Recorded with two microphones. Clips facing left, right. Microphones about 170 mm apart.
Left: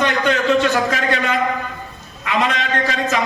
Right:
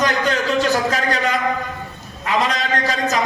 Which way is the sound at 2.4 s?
40° right (ahead or behind).